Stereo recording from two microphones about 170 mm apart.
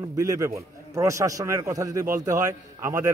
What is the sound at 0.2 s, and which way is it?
A man's voice, 20° right (ahead or behind).